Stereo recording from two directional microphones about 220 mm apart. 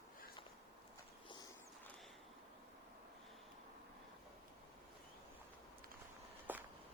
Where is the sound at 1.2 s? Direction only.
20° left (ahead or behind).